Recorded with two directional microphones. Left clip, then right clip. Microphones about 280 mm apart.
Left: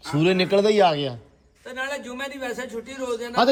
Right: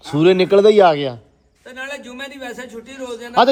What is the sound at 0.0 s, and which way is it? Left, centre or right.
A man's voice, centre.